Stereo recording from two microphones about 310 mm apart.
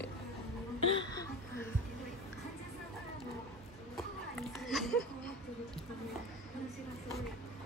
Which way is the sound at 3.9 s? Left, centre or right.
Centre.